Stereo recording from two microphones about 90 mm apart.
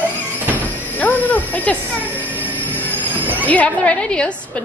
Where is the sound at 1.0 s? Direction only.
20° left (ahead or behind).